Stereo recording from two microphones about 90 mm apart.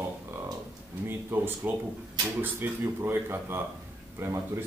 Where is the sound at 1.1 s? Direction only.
25° right (ahead or behind).